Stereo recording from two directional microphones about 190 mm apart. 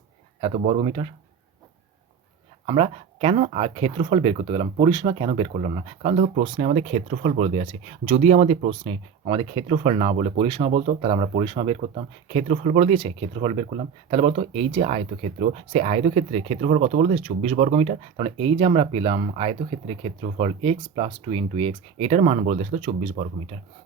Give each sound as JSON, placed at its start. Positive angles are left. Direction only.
{"t": 0.4, "sound": "speech", "side_deg": -35}
{"t": 2.6, "sound": "speech", "side_deg": -30}